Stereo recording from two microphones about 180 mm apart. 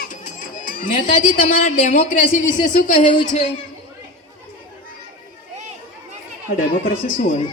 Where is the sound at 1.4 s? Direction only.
50° left (ahead or behind).